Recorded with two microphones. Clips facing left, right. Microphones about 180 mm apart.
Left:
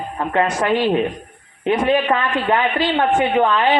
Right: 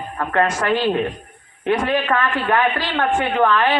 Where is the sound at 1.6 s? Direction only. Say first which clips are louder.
Left 2 dB; 20° left (ahead or behind).